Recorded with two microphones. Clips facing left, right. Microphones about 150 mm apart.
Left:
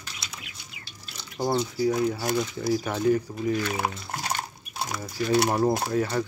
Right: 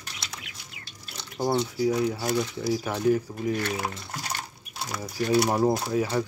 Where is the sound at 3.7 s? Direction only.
70° left (ahead or behind).